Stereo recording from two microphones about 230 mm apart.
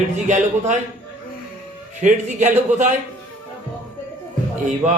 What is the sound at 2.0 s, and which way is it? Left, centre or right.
Speech, right.